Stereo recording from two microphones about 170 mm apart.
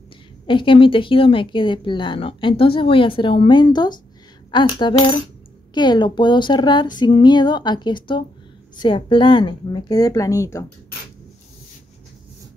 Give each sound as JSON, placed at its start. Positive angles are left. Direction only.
{"t": 0.5, "sound": "speech", "side_deg": 30}
{"t": 4.5, "sound": "a sound", "side_deg": 30}
{"t": 5.8, "sound": "speech", "side_deg": 25}